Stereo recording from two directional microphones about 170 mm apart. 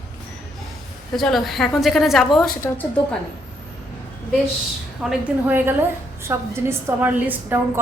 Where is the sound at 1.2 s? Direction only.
Centre (ahead or behind).